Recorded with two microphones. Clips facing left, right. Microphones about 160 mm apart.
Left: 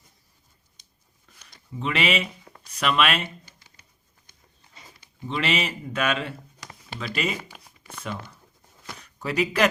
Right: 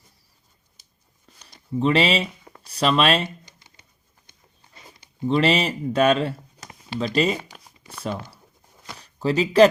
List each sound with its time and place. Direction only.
1.4 s speech: 35° right (ahead or behind)
4.9 s speech: 35° right (ahead or behind)
7.9 s a sound: 35° right (ahead or behind)
9.0 s speech: 30° right (ahead or behind)